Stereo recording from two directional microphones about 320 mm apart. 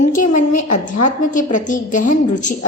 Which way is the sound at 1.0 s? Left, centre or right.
Left.